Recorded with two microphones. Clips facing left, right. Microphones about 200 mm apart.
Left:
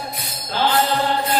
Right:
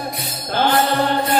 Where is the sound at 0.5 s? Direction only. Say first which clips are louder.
Right 2 dB; 55° right (ahead or behind).